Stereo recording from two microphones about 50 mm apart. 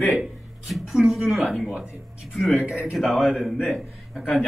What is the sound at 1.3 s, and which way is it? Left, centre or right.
Speech, centre.